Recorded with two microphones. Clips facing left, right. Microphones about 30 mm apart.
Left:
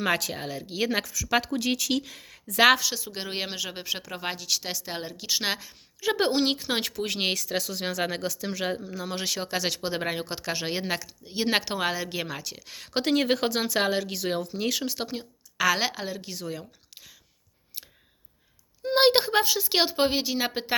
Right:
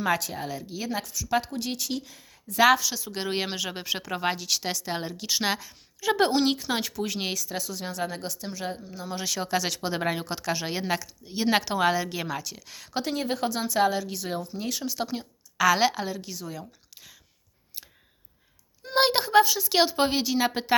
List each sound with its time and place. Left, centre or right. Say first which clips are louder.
0.3 s speech: right 1 dB; left
0.7 s speech: left 4 dB; left
1.9 s speech: left 5 dB; left
2.6 s speech: even; left
2.9 s speech: right 1 dB; centre
3.2 s speech: right 3 dB; centre; by 6.8 s left
6.8 s speech: left 2 dB; left
7.3 s speech: left 3 dB; left
9.2 s speech: right 2 dB; centre
12.9 s speech: left 5 dB; left
14.0 s speech: left 3 dB; left
15.1 s speech: right 1 dB; centre
16.4 s speech: left 2 dB; left
18.8 s a woman's voice: left 3 dB; centre